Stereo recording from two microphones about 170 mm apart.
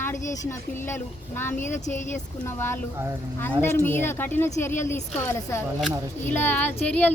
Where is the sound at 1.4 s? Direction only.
15° left (ahead or behind).